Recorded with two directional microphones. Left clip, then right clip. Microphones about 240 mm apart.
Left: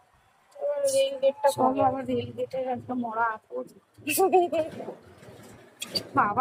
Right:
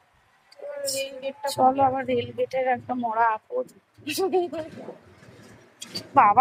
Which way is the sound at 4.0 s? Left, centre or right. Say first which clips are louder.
Left 3 dB; left.